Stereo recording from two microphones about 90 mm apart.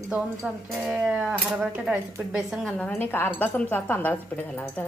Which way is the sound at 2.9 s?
25° left (ahead or behind).